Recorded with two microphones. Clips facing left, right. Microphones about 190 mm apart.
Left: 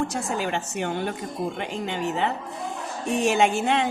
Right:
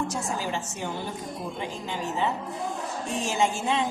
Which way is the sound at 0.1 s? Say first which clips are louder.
Left 3 dB; 65° left (ahead or behind).